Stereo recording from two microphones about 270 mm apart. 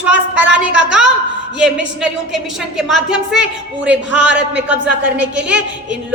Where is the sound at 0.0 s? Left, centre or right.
Centre.